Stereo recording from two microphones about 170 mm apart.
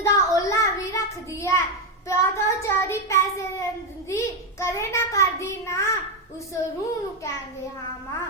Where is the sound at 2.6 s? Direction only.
15° left (ahead or behind).